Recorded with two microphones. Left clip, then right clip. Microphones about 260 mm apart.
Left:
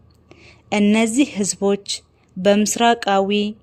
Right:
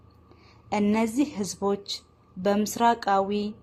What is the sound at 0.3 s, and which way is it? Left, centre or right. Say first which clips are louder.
A woman's voice: left 6 dB; left.